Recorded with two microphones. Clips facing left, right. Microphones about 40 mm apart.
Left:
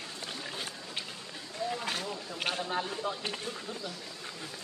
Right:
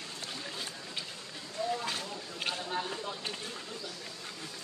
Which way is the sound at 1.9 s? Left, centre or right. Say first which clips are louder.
Left 2 dB; left.